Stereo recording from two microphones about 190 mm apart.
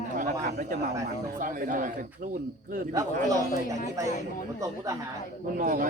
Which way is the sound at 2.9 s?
20° right (ahead or behind).